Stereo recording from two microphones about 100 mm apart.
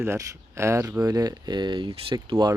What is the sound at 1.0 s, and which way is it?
Speech, 40° right (ahead or behind).